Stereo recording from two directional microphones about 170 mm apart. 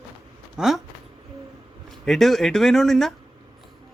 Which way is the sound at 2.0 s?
Centre (ahead or behind).